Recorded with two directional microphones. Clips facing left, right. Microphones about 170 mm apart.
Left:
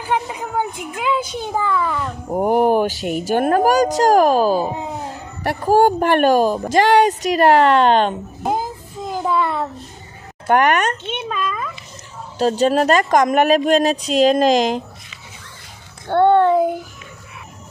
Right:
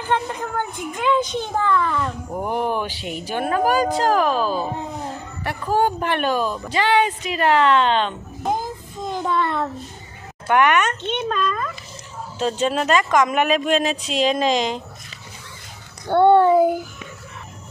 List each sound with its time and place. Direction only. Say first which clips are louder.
0.0 s a child's voice: left 1 dB; 10° left (ahead or behind)
2.2 s speech: left 12 dB; 45° left (ahead or behind)
8.5 s child singing: left 3 dB; 5° left (ahead or behind)
10.5 s speech: left 2 dB; 40° left (ahead or behind)
11.1 s speech: right 2 dB; 5° left (ahead or behind)
12.4 s speech: left 6 dB; 40° left (ahead or behind)
16.1 s child singing: even; 5° right (ahead or behind)